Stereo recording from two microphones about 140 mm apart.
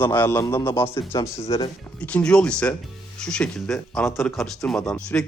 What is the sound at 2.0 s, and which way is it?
A man's voice, 10° left (ahead or behind).